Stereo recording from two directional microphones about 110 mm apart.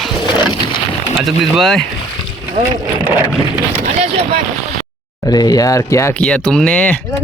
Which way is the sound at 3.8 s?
90° right.